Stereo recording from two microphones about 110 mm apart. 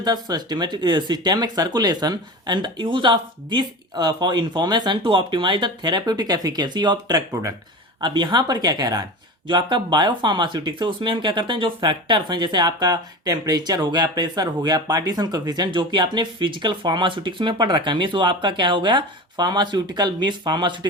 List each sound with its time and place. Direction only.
0.0 s speech: 35° right (ahead or behind)